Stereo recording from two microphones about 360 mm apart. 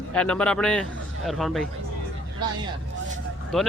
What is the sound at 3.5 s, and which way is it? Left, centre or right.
Speech, centre.